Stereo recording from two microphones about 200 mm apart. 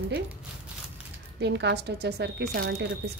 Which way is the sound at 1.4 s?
60° right (ahead or behind).